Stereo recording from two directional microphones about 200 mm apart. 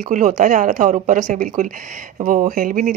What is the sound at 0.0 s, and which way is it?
Speech, 40° right (ahead or behind).